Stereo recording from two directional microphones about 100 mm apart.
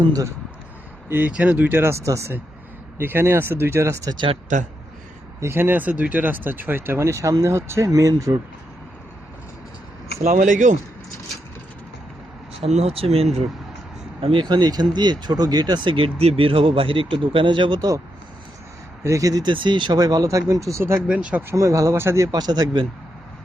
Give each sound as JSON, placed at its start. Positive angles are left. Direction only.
{"t": 1.1, "sound": "speech", "side_deg": -15}
{"t": 5.4, "sound": "speech", "side_deg": -25}
{"t": 12.5, "sound": "speech", "side_deg": -85}
{"t": 14.2, "sound": "speech", "side_deg": -70}
{"t": 14.4, "sound": "speech", "side_deg": -45}
{"t": 19.0, "sound": "speech", "side_deg": -35}
{"t": 21.1, "sound": "speech", "side_deg": -10}
{"t": 21.4, "sound": "speech", "side_deg": -30}
{"t": 22.4, "sound": "speech", "side_deg": -40}